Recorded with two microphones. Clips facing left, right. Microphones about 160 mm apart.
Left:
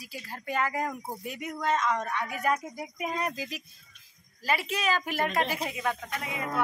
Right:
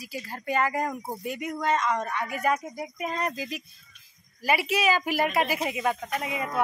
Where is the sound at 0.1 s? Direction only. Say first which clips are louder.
Right 4 dB; centre (ahead or behind).